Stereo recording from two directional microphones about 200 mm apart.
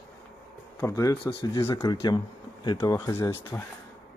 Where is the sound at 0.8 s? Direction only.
15° left (ahead or behind).